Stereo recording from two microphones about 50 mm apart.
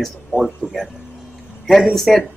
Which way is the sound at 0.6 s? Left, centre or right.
Left.